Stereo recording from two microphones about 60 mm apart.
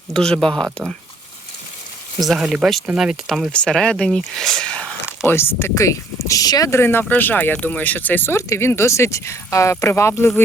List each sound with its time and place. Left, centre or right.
0.1 s speech: centre
2.2 s speech: centre
3.2 s speech: centre
3.5 s speech: centre
5.2 s speech: left
6.7 s speech: left
8.4 s speech: left
9.9 s speech: left